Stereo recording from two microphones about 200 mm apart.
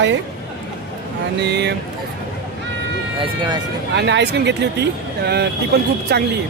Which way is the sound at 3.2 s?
20° right (ahead or behind).